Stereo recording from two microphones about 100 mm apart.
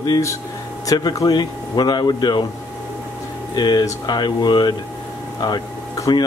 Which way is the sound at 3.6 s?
45° left (ahead or behind).